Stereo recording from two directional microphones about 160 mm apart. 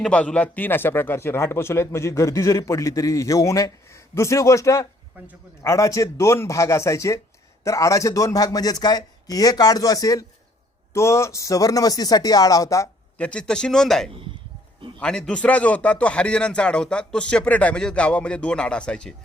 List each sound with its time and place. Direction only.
0.0 s a man's voice: 5° left (ahead or behind)
13.1 s a man's voice: 10° left (ahead or behind)